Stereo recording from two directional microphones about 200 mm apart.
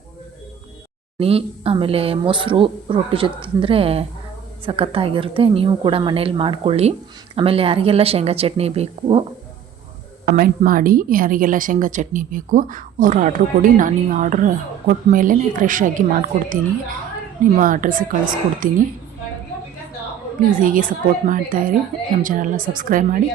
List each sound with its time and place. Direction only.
1.2 s speech: 30° right (ahead or behind)
10.2 s a woman's voice: 50° right (ahead or behind)
17.6 s a woman's voice: 45° right (ahead or behind)
20.5 s a woman's voice: 40° right (ahead or behind)